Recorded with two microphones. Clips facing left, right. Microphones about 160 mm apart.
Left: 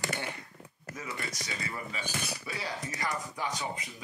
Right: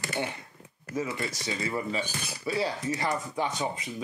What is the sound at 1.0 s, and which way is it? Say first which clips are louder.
Speech: right 8 dB; 25° right (ahead or behind).